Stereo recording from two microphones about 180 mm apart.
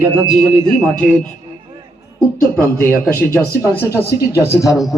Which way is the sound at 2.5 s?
10° left (ahead or behind).